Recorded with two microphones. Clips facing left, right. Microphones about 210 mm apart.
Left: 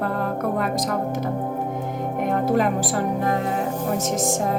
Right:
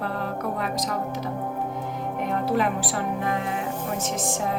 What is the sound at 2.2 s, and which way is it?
Speech, 45° left (ahead or behind).